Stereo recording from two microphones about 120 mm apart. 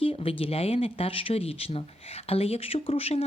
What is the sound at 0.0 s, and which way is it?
Speech, 50° left (ahead or behind).